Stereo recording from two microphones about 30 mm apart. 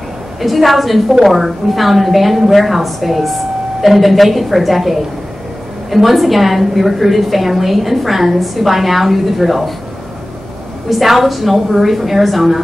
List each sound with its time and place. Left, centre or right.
0.4 s a woman's voice: centre
10.9 s a woman's voice: centre